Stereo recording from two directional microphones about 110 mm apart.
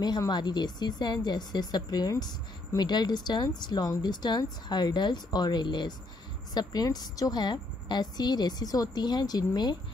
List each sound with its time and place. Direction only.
0.3 s a woman's voice: 40° left (ahead or behind)